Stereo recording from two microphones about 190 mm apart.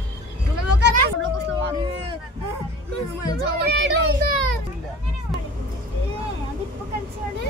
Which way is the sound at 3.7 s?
60° right (ahead or behind).